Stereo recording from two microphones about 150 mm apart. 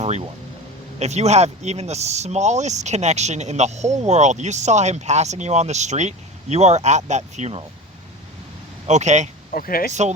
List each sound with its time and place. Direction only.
0.0 s music: 45° right (ahead or behind)
0.9 s speech: 45° right (ahead or behind)
8.9 s speech: 50° right (ahead or behind)
9.5 s speech: 75° left (ahead or behind)